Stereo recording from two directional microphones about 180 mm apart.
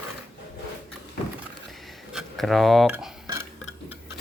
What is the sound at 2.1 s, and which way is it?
Speech, centre (ahead or behind).